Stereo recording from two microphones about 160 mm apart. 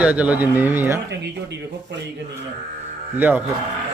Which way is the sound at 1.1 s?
90° right.